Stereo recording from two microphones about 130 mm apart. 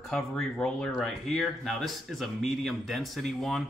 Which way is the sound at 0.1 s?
5° left (ahead or behind).